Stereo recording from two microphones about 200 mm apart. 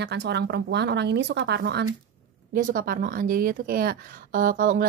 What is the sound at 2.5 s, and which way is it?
Speech, 45° right (ahead or behind).